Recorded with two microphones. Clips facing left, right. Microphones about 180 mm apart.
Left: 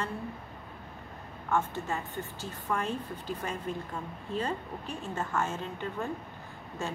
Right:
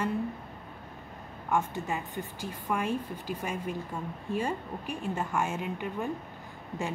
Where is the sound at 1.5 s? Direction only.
15° right (ahead or behind).